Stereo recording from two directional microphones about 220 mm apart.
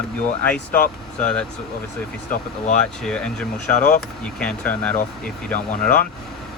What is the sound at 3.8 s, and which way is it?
Speech, 35° left (ahead or behind).